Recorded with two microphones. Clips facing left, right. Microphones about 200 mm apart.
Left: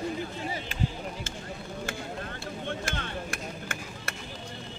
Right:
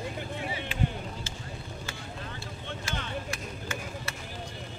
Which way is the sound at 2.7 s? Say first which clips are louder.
Left 1 dB; 55° left (ahead or behind).